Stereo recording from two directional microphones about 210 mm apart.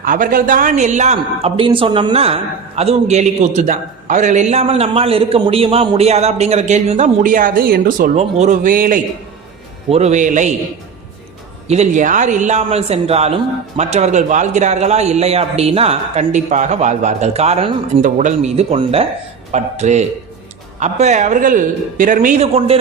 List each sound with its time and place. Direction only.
0.0 s speech: 40° right (ahead or behind)
11.7 s speech: 35° right (ahead or behind)